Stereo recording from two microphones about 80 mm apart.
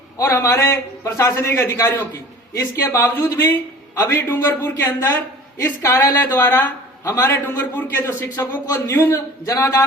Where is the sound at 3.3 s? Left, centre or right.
Left.